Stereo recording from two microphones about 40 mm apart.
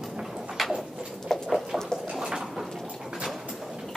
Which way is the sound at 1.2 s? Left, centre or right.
Centre.